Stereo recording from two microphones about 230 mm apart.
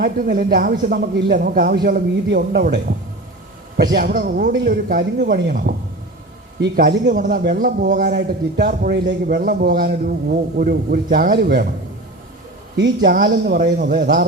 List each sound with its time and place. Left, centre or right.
0.0 s a man's voice: right
12.7 s a man's voice: right